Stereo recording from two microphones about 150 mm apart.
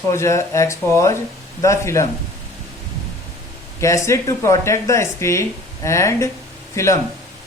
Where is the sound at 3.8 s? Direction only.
20° left (ahead or behind).